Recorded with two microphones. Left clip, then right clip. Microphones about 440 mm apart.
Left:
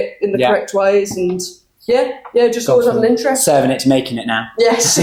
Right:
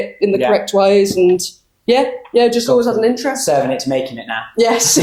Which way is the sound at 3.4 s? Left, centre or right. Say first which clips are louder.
Left 1 dB; left.